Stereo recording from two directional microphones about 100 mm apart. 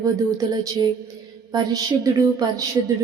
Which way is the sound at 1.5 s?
40° right (ahead or behind).